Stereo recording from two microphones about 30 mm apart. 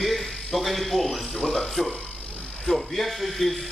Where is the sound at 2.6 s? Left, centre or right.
Centre.